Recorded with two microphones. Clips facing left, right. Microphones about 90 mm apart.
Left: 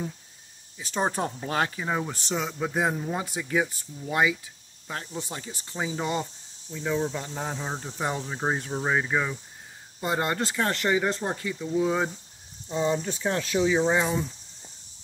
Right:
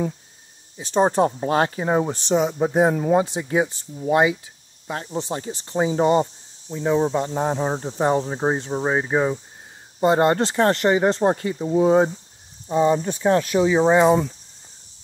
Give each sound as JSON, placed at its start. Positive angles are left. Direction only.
{"t": 0.7, "sound": "speech", "side_deg": -30}
{"t": 2.9, "sound": "speech", "side_deg": -50}
{"t": 3.3, "sound": "speech", "side_deg": -30}
{"t": 5.1, "sound": "speech", "side_deg": -35}